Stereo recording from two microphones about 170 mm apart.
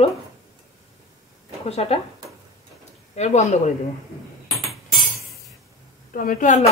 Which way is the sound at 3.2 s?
40° left (ahead or behind).